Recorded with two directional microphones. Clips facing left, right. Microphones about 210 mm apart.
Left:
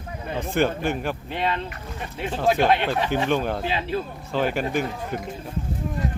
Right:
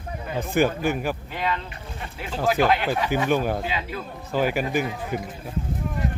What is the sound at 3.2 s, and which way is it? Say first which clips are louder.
Speech: right 1 dB; 10° right (ahead or behind).